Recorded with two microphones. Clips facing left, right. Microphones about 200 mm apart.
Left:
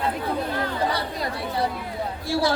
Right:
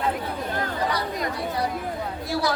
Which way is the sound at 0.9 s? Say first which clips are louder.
Even; 30° left (ahead or behind).